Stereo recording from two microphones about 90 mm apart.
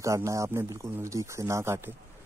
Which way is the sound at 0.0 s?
35° right (ahead or behind).